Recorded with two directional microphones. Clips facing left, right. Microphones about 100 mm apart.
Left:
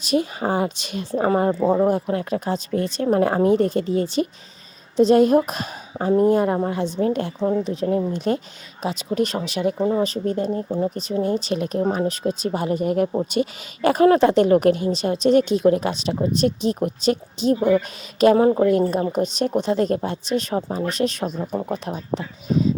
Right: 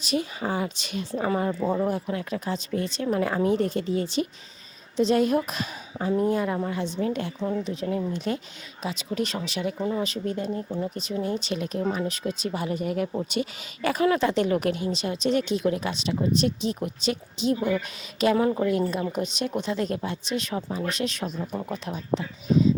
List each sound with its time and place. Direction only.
0.0 s speech: 55° left (ahead or behind)
1.2 s a woman's voice: 45° left (ahead or behind)
7.3 s speech: 40° left (ahead or behind)
8.1 s a woman's voice: 50° left (ahead or behind)
9.7 s a woman's voice: 35° left (ahead or behind)
18.4 s a woman's voice: 35° left (ahead or behind)